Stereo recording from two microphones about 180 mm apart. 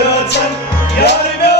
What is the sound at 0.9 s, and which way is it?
Music, 65° left (ahead or behind).